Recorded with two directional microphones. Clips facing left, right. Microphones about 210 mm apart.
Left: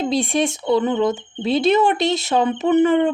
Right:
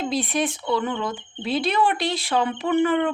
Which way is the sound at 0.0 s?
25° left (ahead or behind).